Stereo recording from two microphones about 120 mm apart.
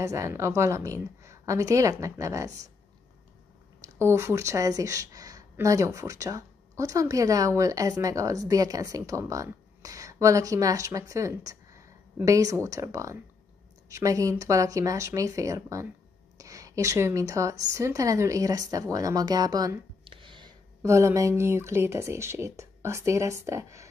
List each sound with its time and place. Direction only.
0.0 s speech: 25° right (ahead or behind)
3.8 s a woman's voice: 25° right (ahead or behind)
20.1 s a sound: 45° right (ahead or behind)
20.8 s speech: 25° right (ahead or behind)